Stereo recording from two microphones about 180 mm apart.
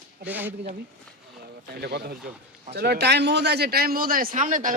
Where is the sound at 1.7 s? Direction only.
65° right (ahead or behind).